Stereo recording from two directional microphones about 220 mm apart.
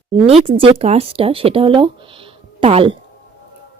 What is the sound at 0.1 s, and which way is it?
Speech, 25° right (ahead or behind).